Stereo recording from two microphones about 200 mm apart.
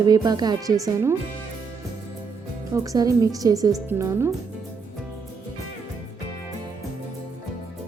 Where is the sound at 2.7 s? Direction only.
15° right (ahead or behind).